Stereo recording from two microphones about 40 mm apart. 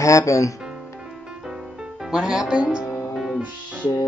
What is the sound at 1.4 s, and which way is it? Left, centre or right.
Music, centre.